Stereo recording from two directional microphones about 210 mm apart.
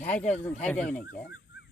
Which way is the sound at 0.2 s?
30° left (ahead or behind).